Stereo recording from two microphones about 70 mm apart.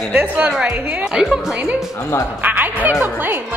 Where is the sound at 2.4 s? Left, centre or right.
Right.